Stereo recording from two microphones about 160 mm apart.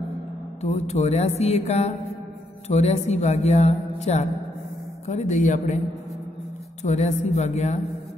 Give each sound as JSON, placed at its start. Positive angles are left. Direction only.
{"t": 0.6, "sound": "speech", "side_deg": 45}
{"t": 6.8, "sound": "speech", "side_deg": 45}